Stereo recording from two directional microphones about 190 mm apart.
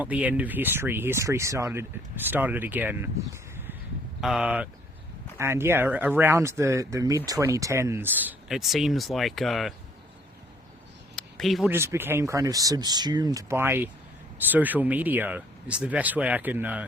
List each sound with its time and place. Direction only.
0.0 s speech: 10° right (ahead or behind)
4.2 s speech: centre (ahead or behind)
11.1 s a sound: centre (ahead or behind)
11.7 s speech: 10° right (ahead or behind)